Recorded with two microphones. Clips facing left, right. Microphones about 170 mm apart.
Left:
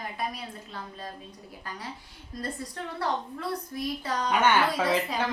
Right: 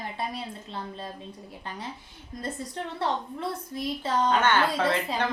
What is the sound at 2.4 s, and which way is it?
A woman's voice, 25° right (ahead or behind).